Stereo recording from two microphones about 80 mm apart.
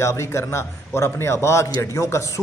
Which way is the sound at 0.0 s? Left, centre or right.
Left.